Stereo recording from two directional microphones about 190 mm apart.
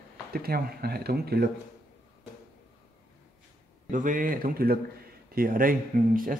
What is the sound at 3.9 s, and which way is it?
Speech, 45° right (ahead or behind).